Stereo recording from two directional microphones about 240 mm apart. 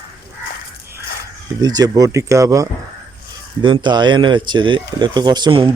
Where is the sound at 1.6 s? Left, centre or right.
Centre.